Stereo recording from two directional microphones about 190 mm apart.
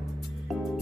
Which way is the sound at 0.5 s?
Centre (ahead or behind).